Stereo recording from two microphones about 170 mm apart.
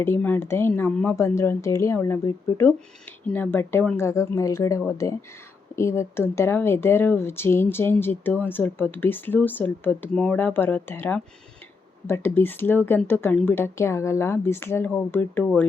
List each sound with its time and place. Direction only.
0.0 s speech: 10° left (ahead or behind)